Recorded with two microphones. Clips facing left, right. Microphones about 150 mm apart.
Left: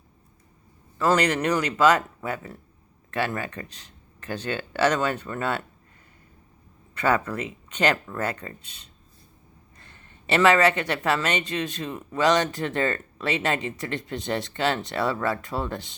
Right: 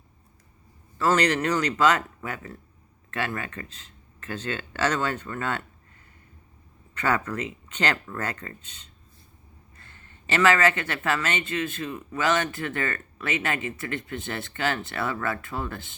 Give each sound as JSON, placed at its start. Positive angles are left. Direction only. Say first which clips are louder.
{"t": 0.9, "sound": "speech", "louder": "left 1 dB", "side_deg": 15}
{"t": 6.9, "sound": "speech", "louder": "left 2 dB", "side_deg": 10}
{"t": 10.3, "sound": "speech", "louder": "left 2 dB", "side_deg": 20}